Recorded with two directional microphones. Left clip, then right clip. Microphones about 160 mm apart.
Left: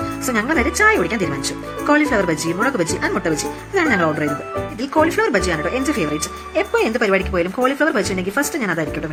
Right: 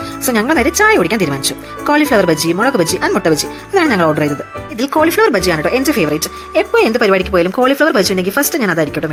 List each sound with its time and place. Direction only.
0.3 s speech: 30° right (ahead or behind)